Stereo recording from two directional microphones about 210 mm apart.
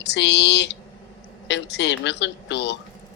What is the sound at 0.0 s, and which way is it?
Speech, 55° left (ahead or behind).